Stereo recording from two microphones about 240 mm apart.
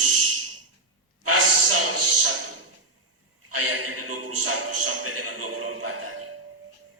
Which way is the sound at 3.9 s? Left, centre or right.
Right.